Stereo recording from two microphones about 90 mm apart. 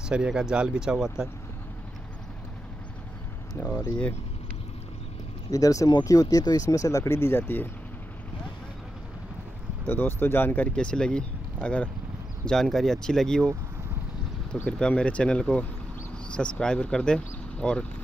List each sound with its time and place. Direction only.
0.1 s speech: 10° right (ahead or behind)
3.6 s speech: 20° left (ahead or behind)
5.5 s speech: 40° left (ahead or behind); by 7.7 s 25° left (ahead or behind)
9.8 s speech: 25° left (ahead or behind); by 13.5 s 5° left (ahead or behind)
14.7 s speech: 10° left (ahead or behind)